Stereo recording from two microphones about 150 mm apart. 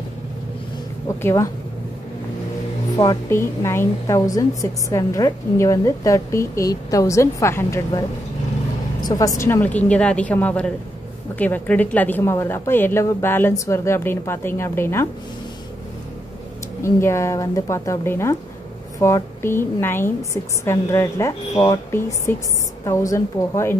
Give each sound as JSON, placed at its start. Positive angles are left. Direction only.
{"t": 1.0, "sound": "a woman's voice", "side_deg": 20}
{"t": 3.0, "sound": "a woman's voice", "side_deg": 20}
{"t": 9.0, "sound": "a woman's voice", "side_deg": 25}
{"t": 9.4, "sound": "a woman's voice", "side_deg": 15}
{"t": 16.8, "sound": "a woman's voice", "side_deg": 20}